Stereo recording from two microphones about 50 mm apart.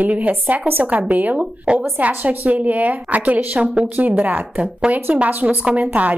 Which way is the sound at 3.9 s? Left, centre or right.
Right.